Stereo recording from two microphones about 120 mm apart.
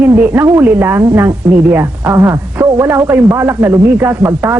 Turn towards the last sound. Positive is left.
turn(degrees=-20)  # may be behind; listen again after turning